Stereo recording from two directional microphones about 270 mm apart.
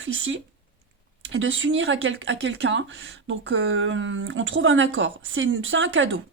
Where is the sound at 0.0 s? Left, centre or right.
Right.